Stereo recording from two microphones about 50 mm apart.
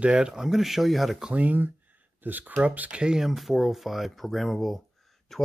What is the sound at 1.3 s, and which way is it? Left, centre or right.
Speech, right.